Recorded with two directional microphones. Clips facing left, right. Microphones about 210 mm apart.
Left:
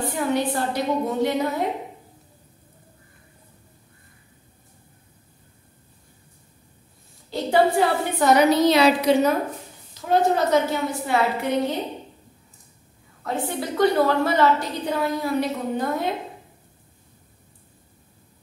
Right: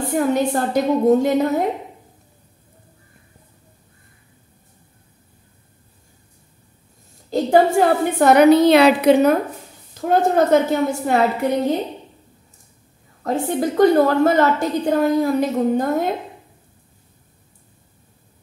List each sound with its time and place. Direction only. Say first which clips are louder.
0.0 s a woman's voice: right 5 dB; 45° right (ahead or behind)
7.2 s a woman's voice: right 4 dB; 45° right (ahead or behind)
13.2 s a woman's voice: right 7 dB; 45° right (ahead or behind)